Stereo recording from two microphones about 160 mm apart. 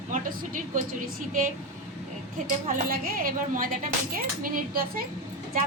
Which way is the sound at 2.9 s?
65° right (ahead or behind).